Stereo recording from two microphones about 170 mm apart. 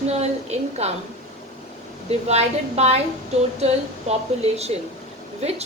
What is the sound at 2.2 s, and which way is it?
Speech, 40° right (ahead or behind).